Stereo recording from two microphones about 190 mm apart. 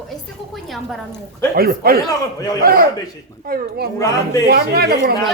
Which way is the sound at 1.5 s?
55° right (ahead or behind).